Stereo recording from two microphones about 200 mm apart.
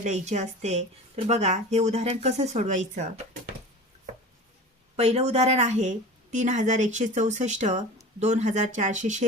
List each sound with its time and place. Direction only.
0.0 s speech: 35° right (ahead or behind)
4.9 s speech: 30° right (ahead or behind)